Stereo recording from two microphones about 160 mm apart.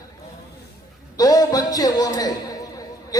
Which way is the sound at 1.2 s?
25° left (ahead or behind).